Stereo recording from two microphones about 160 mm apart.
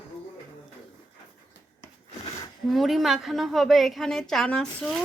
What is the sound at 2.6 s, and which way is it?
A woman's voice, centre (ahead or behind).